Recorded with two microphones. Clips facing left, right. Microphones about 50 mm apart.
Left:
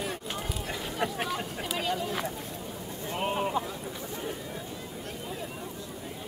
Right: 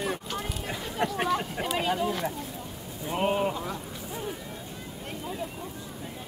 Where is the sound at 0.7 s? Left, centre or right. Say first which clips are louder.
Right 2 dB; centre.